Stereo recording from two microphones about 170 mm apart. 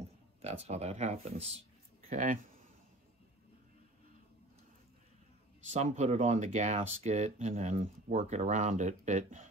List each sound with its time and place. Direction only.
0.4 s speech: 40° right (ahead or behind)
2.0 s speech: 50° right (ahead or behind)
5.7 s speech: 40° right (ahead or behind)